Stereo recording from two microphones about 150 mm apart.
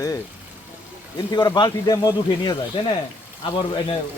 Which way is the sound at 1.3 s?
30° left (ahead or behind).